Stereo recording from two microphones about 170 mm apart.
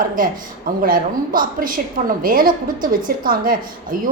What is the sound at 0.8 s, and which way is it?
A woman's voice, 55° right (ahead or behind).